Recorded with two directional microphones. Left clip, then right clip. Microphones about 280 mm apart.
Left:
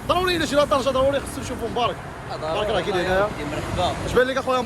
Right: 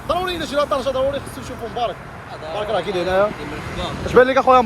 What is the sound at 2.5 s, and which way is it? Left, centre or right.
Speech, centre.